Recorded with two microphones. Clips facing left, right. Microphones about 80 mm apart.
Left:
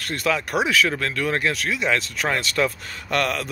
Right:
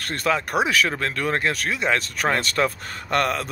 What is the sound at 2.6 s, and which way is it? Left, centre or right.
Speech, right.